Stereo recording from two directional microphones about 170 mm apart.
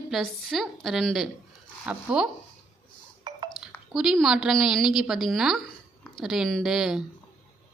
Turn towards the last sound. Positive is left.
turn(degrees=0)  # may be behind; listen again after turning